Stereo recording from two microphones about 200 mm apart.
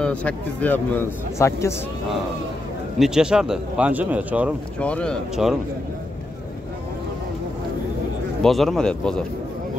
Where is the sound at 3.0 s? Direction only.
5° right (ahead or behind).